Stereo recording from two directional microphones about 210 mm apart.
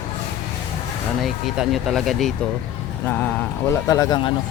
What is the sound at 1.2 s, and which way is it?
Speech, centre (ahead or behind).